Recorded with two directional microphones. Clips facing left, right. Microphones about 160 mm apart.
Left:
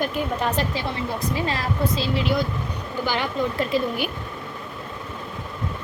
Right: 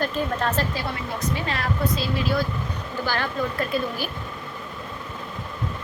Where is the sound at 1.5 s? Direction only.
25° left (ahead or behind).